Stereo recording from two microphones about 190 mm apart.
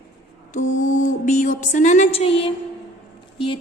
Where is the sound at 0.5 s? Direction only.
40° left (ahead or behind).